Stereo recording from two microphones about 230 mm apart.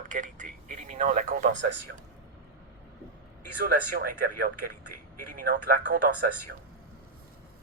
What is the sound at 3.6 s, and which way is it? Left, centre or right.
Speech, right.